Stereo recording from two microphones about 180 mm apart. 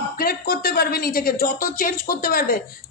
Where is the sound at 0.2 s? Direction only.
55° left (ahead or behind).